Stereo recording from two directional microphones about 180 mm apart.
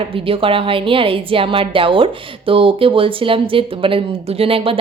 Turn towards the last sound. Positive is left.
turn(degrees=-30)  # may be behind; listen again after turning